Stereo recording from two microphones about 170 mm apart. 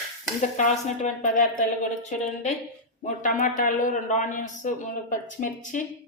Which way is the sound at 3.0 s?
45° left (ahead or behind).